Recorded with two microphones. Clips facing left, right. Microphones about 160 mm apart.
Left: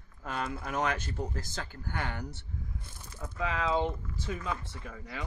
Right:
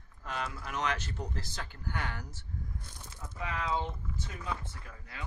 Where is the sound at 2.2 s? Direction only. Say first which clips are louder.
Left 6 dB; 65° left (ahead or behind).